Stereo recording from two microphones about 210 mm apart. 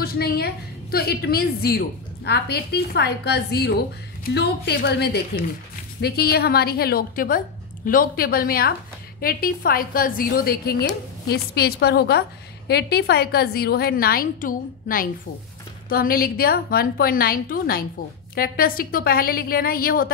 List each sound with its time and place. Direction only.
0.0 s a woman's voice: 45° left (ahead or behind)